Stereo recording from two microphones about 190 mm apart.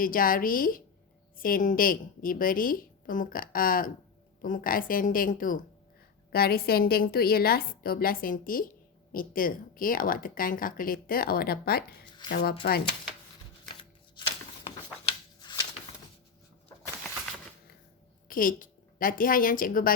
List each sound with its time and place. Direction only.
0.0 s speech: 50° left (ahead or behind)
14.2 s a sound: 25° left (ahead or behind)
18.3 s a woman's voice: 45° left (ahead or behind)